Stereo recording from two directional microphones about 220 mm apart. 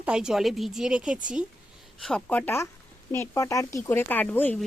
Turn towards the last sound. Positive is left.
turn(degrees=5)  # may be behind; listen again after turning